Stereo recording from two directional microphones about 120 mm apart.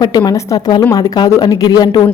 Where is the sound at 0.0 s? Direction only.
30° left (ahead or behind).